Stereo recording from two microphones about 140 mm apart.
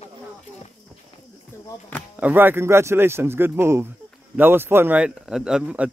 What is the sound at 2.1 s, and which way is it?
Speech, 10° right (ahead or behind).